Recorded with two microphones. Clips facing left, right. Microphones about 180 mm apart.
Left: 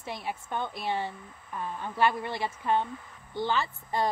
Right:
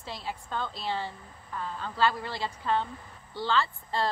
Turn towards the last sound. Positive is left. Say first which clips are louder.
# left 1 dB
turn(degrees=15)  # may be behind; listen again after turning